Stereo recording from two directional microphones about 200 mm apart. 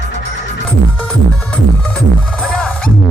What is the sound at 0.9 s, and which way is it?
Music, 5° left (ahead or behind).